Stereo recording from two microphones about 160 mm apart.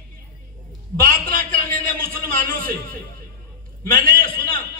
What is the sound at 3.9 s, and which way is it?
Speech, 60° right (ahead or behind).